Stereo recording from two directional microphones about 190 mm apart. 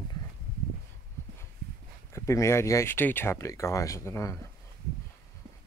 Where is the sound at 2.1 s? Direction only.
15° left (ahead or behind).